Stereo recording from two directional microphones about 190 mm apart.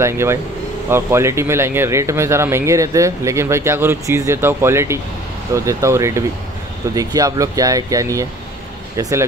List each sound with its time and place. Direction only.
0.0 s speech: 15° right (ahead or behind)